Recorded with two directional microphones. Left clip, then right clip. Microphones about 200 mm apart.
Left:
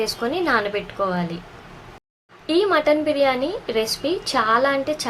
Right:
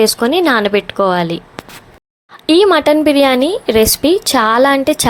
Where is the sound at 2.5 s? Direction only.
45° right (ahead or behind).